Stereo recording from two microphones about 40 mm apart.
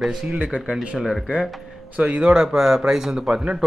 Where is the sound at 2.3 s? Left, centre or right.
Centre.